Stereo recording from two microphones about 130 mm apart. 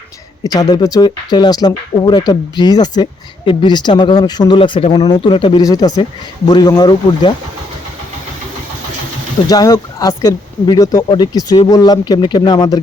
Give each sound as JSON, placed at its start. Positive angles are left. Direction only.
{"t": 0.4, "sound": "speech", "side_deg": 30}
{"t": 9.5, "sound": "speech", "side_deg": 30}